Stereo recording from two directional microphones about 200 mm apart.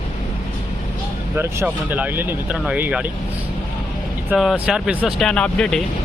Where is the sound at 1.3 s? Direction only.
10° right (ahead or behind).